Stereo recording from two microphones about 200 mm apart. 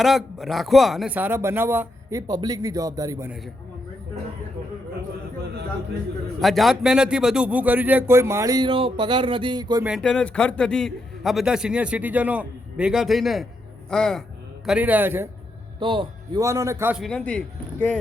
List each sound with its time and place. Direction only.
0.0 s a man's voice: centre (ahead or behind)
6.4 s a man's voice: centre (ahead or behind); by 9.8 s 20° right (ahead or behind)
9.8 s a man's voice: centre (ahead or behind)
14.7 s a man's voice: 10° right (ahead or behind)
15.8 s a man's voice: 25° right (ahead or behind)
17.0 s speech: 5° left (ahead or behind)